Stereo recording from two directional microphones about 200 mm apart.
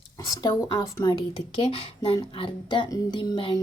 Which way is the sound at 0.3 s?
20° left (ahead or behind).